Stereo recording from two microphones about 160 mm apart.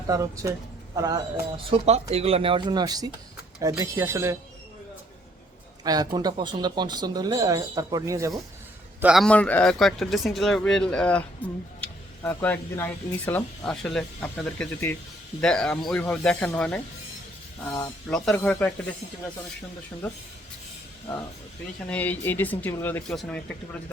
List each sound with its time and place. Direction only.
0.1 s speech: 20° right (ahead or behind)
1.7 s speech: 40° right (ahead or behind); by 4.4 s 15° right (ahead or behind)
5.8 s speech: 25° right (ahead or behind)
9.0 s a man's voice: 5° right (ahead or behind)
9.2 s speech: 10° left (ahead or behind)
21.8 s speech: 10° left (ahead or behind)